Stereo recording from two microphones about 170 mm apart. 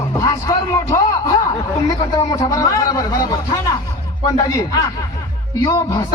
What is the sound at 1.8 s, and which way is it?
A man's voice, 20° left (ahead or behind).